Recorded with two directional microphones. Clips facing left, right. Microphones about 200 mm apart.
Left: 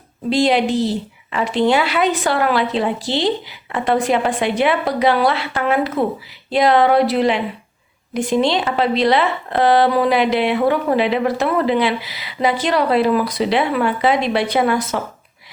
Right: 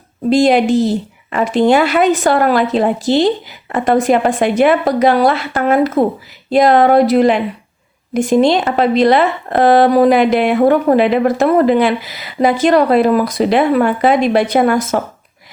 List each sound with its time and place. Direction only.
0.3 s a woman's voice: 45° right (ahead or behind)